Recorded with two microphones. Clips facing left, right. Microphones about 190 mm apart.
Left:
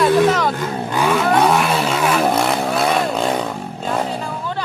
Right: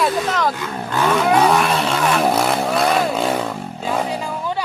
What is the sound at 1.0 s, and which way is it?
Vehicle, 10° left (ahead or behind).